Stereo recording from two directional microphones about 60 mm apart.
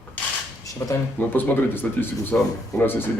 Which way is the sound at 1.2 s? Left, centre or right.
Left.